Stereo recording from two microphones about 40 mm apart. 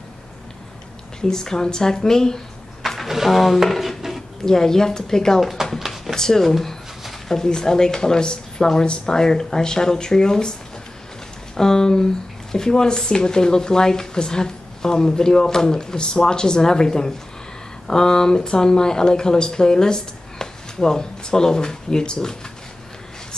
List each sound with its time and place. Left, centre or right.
1.2 s speech: centre
3.0 s speech: centre
4.5 s speech: centre
5.4 s speech: centre
6.1 s speech: centre
11.5 s speech: centre